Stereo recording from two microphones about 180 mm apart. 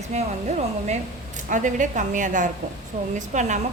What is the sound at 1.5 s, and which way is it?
A woman's voice, 45° right (ahead or behind).